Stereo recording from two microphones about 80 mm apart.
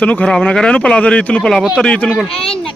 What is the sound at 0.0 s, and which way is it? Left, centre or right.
Speech, centre.